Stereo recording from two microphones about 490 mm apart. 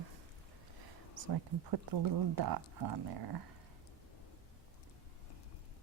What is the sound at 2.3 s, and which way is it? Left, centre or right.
Speech, right.